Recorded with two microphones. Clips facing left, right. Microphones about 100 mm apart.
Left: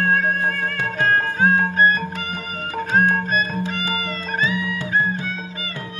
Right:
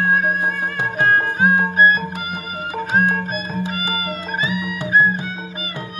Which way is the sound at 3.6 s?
10° right (ahead or behind).